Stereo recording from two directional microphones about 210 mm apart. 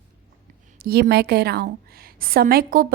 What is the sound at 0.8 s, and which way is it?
A woman's voice, 50° right (ahead or behind).